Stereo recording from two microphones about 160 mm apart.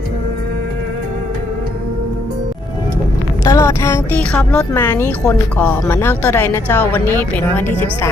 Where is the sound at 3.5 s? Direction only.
20° left (ahead or behind).